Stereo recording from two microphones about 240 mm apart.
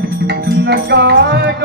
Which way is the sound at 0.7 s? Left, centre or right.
Right.